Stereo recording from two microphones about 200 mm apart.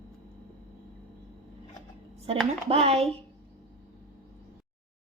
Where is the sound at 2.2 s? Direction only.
30° right (ahead or behind).